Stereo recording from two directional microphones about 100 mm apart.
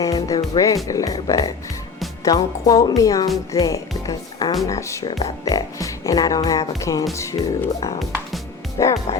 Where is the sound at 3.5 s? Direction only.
35° left (ahead or behind).